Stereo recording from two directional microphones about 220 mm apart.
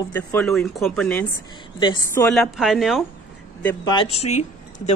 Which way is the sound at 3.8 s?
20° left (ahead or behind).